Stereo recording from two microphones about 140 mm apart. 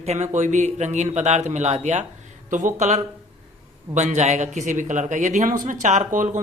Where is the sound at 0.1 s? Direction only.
60° right (ahead or behind).